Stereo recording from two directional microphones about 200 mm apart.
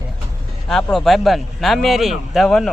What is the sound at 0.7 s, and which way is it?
Speech, centre (ahead or behind).